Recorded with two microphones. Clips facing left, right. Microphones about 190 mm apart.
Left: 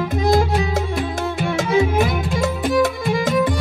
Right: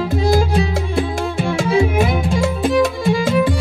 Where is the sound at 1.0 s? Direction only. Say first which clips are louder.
Right 3 dB; 30° right (ahead or behind).